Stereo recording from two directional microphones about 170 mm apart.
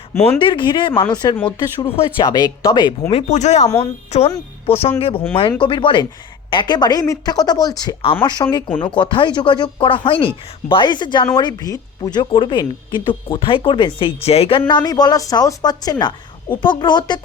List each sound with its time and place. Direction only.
0.3 s speech: 30° left (ahead or behind)
3.2 s a woman's voice: 45° left (ahead or behind)
14.7 s speech: 25° left (ahead or behind)